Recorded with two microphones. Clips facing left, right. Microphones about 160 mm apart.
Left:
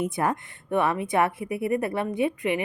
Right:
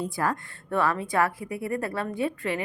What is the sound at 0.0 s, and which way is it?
A woman's voice, 20° left (ahead or behind).